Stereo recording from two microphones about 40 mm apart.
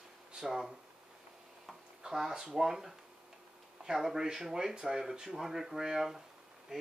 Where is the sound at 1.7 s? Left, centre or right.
Centre.